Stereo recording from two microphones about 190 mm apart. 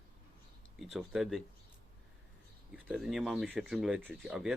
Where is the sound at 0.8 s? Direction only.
Centre (ahead or behind).